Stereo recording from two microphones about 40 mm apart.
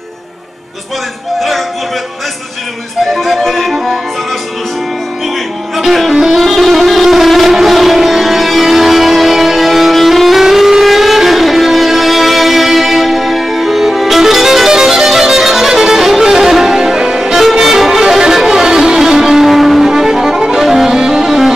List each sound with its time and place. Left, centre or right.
3.2 s music: centre
3.7 s music: centre
5.8 s music: centre
19.9 s violin: centre
20.6 s music: centre